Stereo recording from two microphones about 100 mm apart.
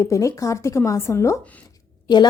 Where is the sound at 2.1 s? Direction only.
45° left (ahead or behind).